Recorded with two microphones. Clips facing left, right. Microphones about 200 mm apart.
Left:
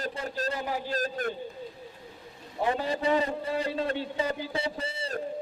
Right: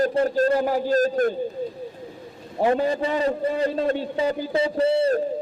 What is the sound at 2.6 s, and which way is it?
A man's voice, 40° right (ahead or behind).